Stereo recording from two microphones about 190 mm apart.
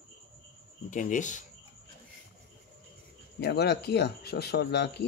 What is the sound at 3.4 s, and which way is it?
Speech, 60° left (ahead or behind).